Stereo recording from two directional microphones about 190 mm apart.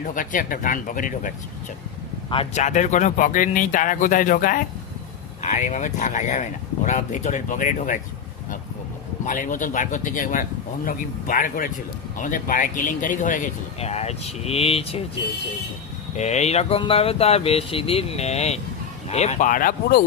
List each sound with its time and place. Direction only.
0.0 s speech: 45° left (ahead or behind)
2.3 s speech: 30° left (ahead or behind)
9.2 s speech: 45° left (ahead or behind)
16.1 s speech: 35° left (ahead or behind)